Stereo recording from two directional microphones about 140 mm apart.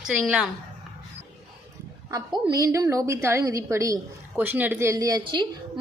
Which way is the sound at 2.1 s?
30° right (ahead or behind).